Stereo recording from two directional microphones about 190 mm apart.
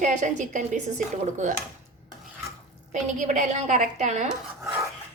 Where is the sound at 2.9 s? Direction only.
40° right (ahead or behind).